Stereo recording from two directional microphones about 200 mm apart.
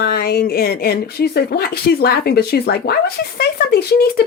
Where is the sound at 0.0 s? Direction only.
50° left (ahead or behind).